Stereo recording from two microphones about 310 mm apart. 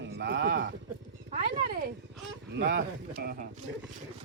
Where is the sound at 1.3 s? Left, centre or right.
Right.